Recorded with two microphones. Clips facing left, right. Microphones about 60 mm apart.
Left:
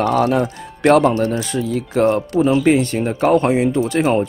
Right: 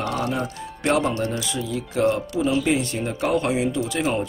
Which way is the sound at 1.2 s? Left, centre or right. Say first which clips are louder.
Left 7 dB; left.